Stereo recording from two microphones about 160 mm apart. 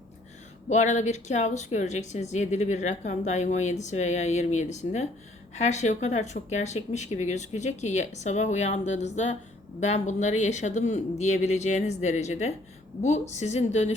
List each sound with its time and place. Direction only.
0.7 s speech: 45° left (ahead or behind)